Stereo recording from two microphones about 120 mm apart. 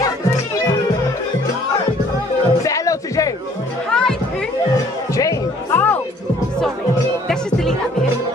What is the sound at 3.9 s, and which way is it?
Music, 5° left (ahead or behind).